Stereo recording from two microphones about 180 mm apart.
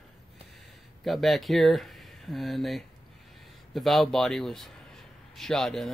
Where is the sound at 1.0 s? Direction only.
Centre (ahead or behind).